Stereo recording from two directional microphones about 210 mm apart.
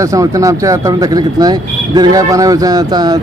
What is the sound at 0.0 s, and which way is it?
Speech, 15° right (ahead or behind).